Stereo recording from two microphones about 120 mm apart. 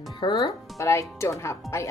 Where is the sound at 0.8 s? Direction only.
25° left (ahead or behind).